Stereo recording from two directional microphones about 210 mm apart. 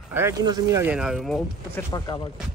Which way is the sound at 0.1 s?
15° right (ahead or behind).